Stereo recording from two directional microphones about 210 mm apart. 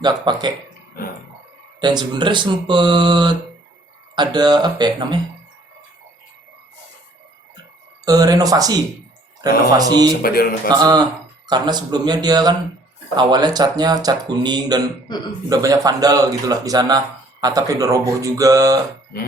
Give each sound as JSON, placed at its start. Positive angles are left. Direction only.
{"t": 0.0, "sound": "speech", "side_deg": -20}
{"t": 1.8, "sound": "speech", "side_deg": -20}
{"t": 8.0, "sound": "speech", "side_deg": -15}
{"t": 10.2, "sound": "speech", "side_deg": 45}
{"t": 10.7, "sound": "speech", "side_deg": -20}